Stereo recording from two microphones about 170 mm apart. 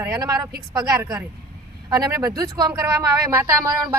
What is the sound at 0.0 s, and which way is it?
Speech, 20° right (ahead or behind).